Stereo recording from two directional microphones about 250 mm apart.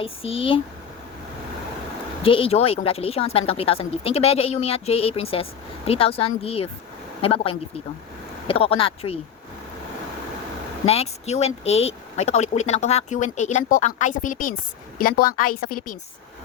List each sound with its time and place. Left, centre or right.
0.0 s speech: left
2.2 s speech: left
10.8 s speech: left